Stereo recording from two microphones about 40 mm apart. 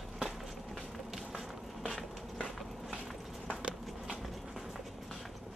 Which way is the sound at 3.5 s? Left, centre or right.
Right.